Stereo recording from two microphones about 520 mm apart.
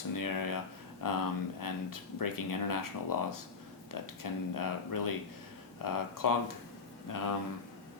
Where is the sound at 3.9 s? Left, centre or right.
Left.